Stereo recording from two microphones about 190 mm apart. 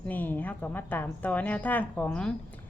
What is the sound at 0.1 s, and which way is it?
A woman's voice, 10° left (ahead or behind).